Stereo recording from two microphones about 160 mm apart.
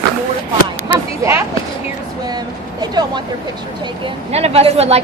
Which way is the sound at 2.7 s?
25° right (ahead or behind).